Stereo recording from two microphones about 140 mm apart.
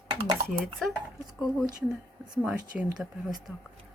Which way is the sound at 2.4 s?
10° right (ahead or behind).